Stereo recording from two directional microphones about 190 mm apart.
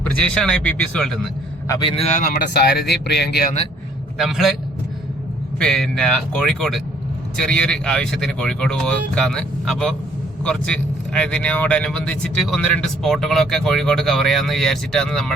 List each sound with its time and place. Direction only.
0.2 s speech: 5° left (ahead or behind)
1.6 s speech: 20° left (ahead or behind); by 3.4 s 60° left (ahead or behind)
4.2 s speech: centre (ahead or behind)
5.5 s speech: centre (ahead or behind)